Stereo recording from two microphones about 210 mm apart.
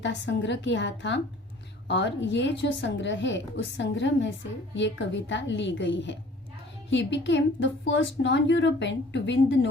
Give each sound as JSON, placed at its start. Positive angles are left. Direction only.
{"t": 0.0, "sound": "a woman's voice", "side_deg": 60}